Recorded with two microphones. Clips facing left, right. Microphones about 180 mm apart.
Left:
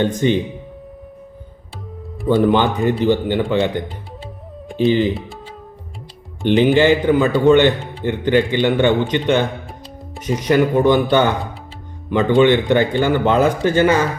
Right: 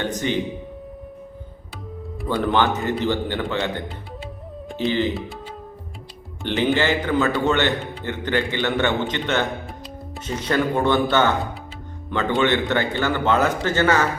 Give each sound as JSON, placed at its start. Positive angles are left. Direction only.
{"t": 0.2, "sound": "speech", "side_deg": 20}
{"t": 2.2, "sound": "a man's voice", "side_deg": 20}
{"t": 6.4, "sound": "a man's voice", "side_deg": 15}